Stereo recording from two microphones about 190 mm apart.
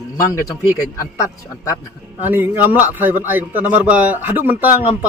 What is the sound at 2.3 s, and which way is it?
Speech, 10° right (ahead or behind).